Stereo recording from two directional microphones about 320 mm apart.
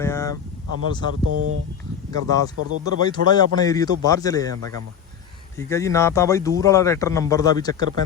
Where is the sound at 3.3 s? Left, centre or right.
Centre.